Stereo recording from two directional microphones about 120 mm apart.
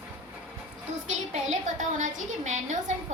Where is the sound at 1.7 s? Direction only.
85° right.